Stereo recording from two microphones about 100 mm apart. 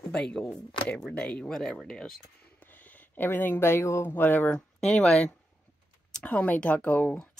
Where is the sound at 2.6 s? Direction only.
15° left (ahead or behind).